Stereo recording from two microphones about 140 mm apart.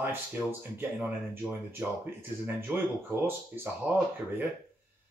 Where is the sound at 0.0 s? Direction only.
15° right (ahead or behind).